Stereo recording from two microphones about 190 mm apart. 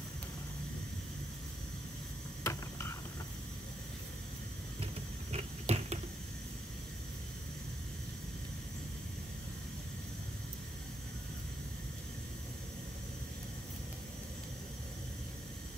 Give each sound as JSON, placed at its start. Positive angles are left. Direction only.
{"t": 2.4, "sound": "ratchet", "side_deg": 15}
{"t": 5.3, "sound": "finger snapping", "side_deg": -35}